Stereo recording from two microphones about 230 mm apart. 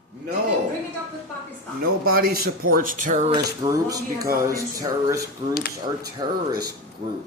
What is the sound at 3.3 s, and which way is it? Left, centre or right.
Speech, centre.